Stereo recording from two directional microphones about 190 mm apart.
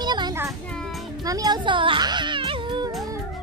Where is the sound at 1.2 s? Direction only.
20° right (ahead or behind).